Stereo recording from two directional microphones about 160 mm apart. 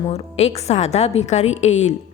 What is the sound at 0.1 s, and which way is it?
A woman's voice, 40° left (ahead or behind).